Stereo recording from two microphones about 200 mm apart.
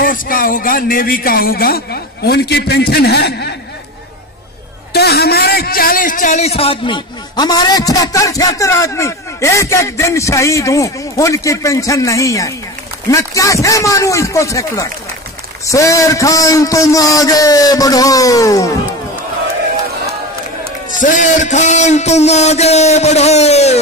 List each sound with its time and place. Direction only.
0.0 s speech: 45° left (ahead or behind)
4.9 s a man's voice: 55° left (ahead or behind); by 18.7 s 15° left (ahead or behind)
21.0 s a man's voice: 40° left (ahead or behind)